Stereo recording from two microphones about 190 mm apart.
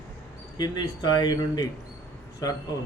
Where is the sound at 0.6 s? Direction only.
20° left (ahead or behind).